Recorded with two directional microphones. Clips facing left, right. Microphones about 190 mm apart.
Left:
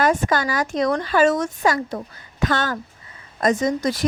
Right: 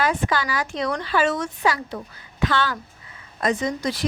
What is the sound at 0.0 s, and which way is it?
A woman's voice, 45° left (ahead or behind).